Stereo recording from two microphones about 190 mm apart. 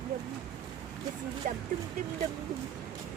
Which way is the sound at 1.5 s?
45° right (ahead or behind).